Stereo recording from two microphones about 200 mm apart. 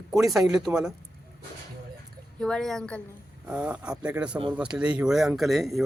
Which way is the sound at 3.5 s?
5° right (ahead or behind).